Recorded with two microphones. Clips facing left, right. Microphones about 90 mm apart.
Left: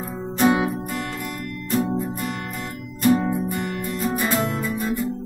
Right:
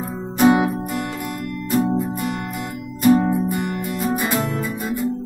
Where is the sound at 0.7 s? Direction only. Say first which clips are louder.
Right 3 dB; 20° right (ahead or behind).